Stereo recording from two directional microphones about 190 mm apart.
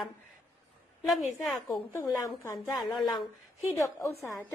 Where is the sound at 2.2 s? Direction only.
20° left (ahead or behind).